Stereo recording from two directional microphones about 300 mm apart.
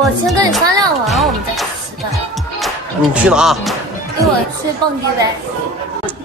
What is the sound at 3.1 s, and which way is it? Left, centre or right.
Speech, centre.